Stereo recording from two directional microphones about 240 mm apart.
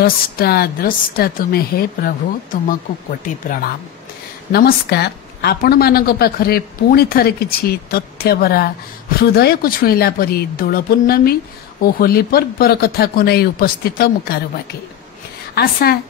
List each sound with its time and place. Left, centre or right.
0.0 s a woman's voice: left
4.5 s a woman's voice: left
15.5 s a woman's voice: left